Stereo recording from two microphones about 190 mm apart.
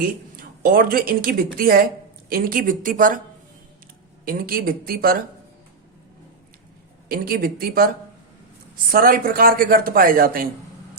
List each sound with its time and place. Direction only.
0.0 s a woman's voice: 50° right (ahead or behind)
4.3 s speech: 50° right (ahead or behind)
7.1 s speech: 50° right (ahead or behind)
8.9 s speech: 50° right (ahead or behind)